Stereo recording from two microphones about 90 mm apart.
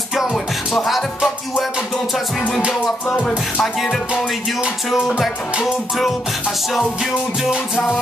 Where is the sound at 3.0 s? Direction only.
15° left (ahead or behind).